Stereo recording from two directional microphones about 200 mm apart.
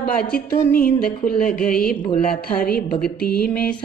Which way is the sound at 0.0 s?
50° left (ahead or behind).